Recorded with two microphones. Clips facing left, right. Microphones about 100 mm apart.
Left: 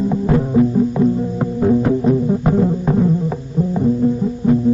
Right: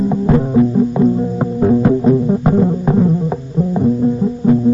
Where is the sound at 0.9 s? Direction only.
20° right (ahead or behind).